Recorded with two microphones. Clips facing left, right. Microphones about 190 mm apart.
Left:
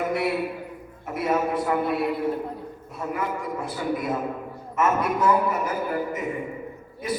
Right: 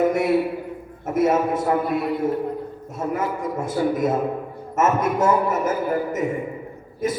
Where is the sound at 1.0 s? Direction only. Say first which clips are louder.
Right 5 dB; 45° right (ahead or behind).